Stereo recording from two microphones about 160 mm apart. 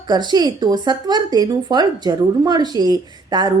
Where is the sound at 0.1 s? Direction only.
25° right (ahead or behind).